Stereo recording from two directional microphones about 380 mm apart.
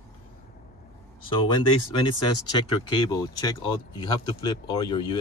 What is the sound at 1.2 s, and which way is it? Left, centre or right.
Speech, centre.